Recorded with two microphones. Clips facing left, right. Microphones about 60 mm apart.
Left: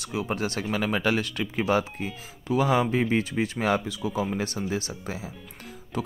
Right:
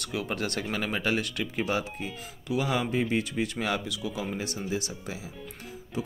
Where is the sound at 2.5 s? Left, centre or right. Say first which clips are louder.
Left 5 dB; left.